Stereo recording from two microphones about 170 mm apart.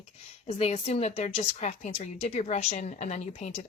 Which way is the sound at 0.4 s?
35° left (ahead or behind).